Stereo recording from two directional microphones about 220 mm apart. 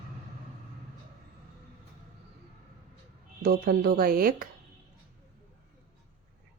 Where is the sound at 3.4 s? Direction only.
45° right (ahead or behind).